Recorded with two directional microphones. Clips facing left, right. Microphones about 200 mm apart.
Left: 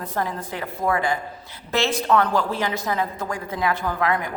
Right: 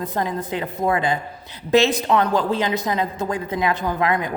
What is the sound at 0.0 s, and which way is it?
A woman's voice, 20° right (ahead or behind).